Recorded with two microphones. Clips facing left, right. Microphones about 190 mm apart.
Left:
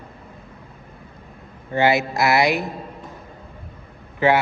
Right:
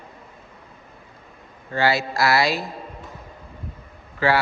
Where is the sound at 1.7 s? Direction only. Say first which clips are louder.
Left 3 dB; 20° left (ahead or behind).